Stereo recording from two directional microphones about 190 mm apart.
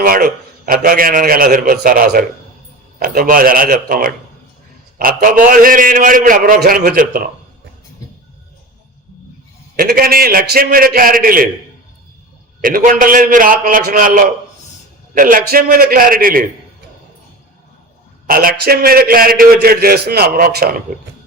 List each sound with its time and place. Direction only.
0.0 s a man's voice: 50° right (ahead or behind)
9.7 s a man's voice: 50° right (ahead or behind)
12.6 s a man's voice: 45° right (ahead or behind)
18.3 s a man's voice: 50° right (ahead or behind)